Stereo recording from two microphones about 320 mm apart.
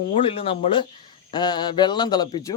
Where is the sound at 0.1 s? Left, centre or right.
Centre.